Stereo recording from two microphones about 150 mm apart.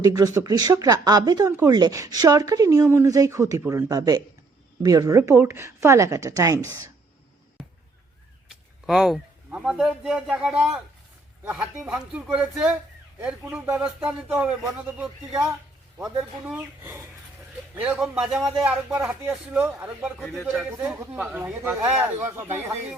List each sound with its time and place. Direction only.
0.0 s speech: 25° right (ahead or behind)
8.4 s speech: centre (ahead or behind)
14.6 s speech: 20° right (ahead or behind)
17.7 s a man's voice: 5° right (ahead or behind)
20.1 s a man's voice: centre (ahead or behind)